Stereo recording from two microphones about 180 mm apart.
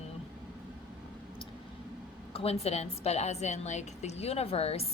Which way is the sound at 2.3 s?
35° left (ahead or behind).